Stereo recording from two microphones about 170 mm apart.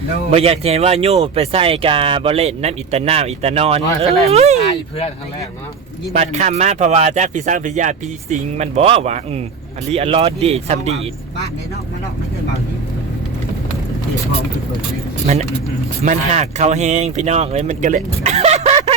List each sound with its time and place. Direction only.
0.3 s speech: 35° right (ahead or behind)
6.1 s speech: 45° right (ahead or behind)
16.0 s speech: 40° right (ahead or behind)